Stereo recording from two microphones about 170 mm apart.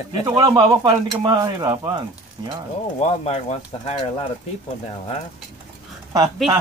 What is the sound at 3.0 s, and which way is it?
Speech, 40° left (ahead or behind).